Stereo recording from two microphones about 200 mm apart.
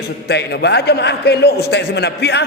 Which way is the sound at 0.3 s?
55° left (ahead or behind).